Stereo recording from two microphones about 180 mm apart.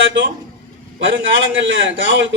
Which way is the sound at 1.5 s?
90° right.